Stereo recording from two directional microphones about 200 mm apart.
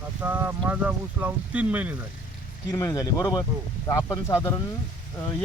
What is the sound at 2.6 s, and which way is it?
Speech, 15° left (ahead or behind).